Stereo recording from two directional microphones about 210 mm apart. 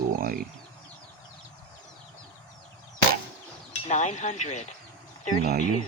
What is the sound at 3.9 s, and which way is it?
Speech, 35° left (ahead or behind).